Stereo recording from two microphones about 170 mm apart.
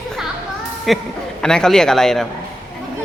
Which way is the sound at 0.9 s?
Centre (ahead or behind).